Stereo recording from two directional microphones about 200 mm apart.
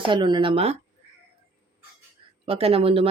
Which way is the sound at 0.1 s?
25° right (ahead or behind).